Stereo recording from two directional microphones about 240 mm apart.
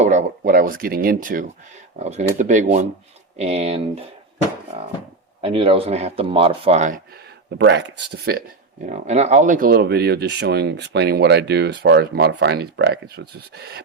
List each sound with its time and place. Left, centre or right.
0.0 s speech: right
5.4 s speech: right
7.6 s speech: right
8.9 s speech: right